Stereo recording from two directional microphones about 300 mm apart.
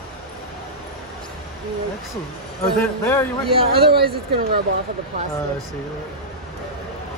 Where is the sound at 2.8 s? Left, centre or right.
Centre.